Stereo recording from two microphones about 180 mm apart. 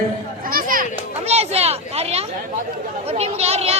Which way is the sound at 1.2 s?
35° right (ahead or behind).